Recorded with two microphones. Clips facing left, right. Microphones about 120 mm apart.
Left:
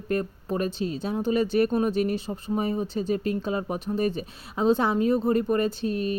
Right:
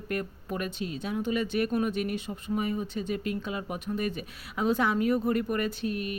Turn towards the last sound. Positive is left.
turn(degrees=30)  # may be behind; listen again after turning